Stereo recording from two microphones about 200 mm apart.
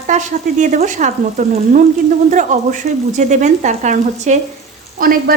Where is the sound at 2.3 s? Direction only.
40° right (ahead or behind).